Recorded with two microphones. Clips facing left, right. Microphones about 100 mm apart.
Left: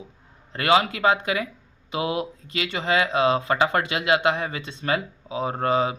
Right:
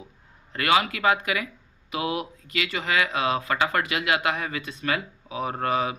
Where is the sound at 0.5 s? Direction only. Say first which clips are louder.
Left 3 dB; 30° left (ahead or behind).